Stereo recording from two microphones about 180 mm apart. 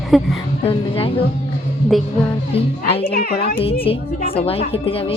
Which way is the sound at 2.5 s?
30° left (ahead or behind).